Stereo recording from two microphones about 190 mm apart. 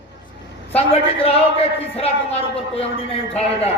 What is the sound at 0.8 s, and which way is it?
Speech, 30° left (ahead or behind).